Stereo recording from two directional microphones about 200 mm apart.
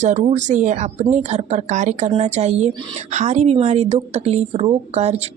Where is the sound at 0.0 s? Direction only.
35° right (ahead or behind).